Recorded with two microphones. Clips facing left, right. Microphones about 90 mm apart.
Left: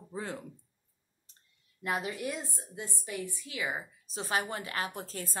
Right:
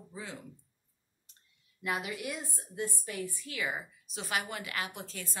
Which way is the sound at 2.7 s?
20° left (ahead or behind).